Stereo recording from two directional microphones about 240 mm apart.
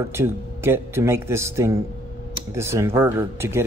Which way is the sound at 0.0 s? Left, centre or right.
Centre.